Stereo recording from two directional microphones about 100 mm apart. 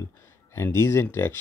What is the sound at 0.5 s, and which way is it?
Speech, 25° left (ahead or behind).